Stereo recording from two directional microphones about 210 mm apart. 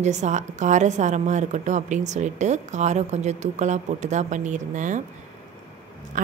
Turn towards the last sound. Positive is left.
turn(degrees=-35)  # may be behind; listen again after turning